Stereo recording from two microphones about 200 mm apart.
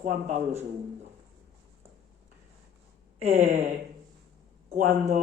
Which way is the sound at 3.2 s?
30° right (ahead or behind).